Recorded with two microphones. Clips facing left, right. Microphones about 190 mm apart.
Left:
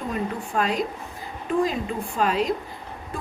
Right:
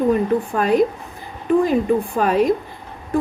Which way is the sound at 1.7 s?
55° right (ahead or behind).